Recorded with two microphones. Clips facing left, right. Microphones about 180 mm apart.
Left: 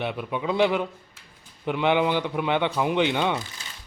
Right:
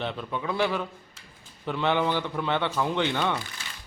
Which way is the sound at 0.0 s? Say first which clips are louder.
Left 3 dB; 10° left (ahead or behind).